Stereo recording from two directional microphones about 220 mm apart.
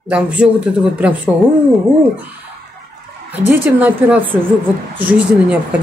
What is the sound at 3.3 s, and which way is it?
Speech, 5° right (ahead or behind).